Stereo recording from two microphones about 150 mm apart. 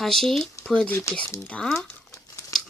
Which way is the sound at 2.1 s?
20° left (ahead or behind).